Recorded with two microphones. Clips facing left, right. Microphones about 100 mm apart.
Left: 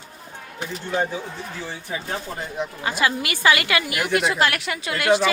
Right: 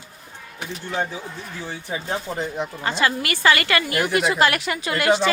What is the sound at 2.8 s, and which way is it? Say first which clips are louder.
A woman's voice: right 1 dB; 10° left (ahead or behind).